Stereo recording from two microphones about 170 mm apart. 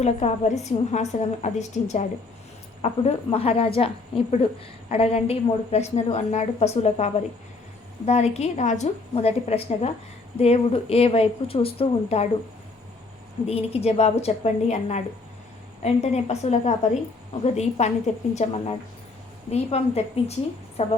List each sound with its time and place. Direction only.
0.0 s a woman's voice: 40° left (ahead or behind)
13.5 s a woman's voice: 35° left (ahead or behind)